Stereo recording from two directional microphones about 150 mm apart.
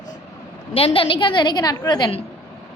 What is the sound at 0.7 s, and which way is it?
A woman's voice, 40° left (ahead or behind).